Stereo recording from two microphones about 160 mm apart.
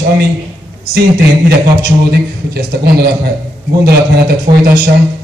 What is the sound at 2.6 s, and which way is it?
A man's voice, 75° right (ahead or behind).